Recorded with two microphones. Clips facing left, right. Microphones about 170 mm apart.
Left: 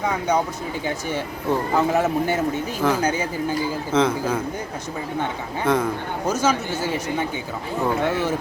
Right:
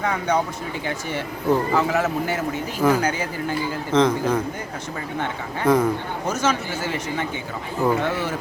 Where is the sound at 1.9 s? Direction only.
25° left (ahead or behind).